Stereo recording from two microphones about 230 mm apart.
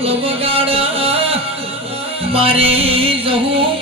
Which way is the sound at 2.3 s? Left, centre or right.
Right.